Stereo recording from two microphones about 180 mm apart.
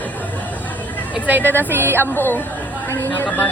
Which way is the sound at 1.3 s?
10° right (ahead or behind).